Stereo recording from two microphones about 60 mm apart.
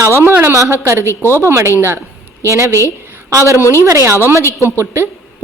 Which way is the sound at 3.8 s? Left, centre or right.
Right.